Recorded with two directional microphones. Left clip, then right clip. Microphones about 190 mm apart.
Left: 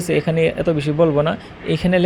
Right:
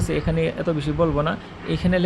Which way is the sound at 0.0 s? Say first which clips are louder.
Left 6 dB; 20° left (ahead or behind).